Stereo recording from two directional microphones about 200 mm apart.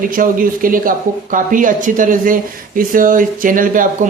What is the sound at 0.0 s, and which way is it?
Speech, 45° right (ahead or behind).